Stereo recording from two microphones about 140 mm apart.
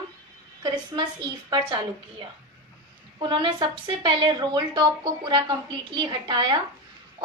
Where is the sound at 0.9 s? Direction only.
35° right (ahead or behind).